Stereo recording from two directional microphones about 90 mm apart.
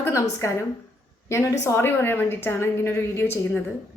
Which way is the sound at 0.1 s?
35° left (ahead or behind).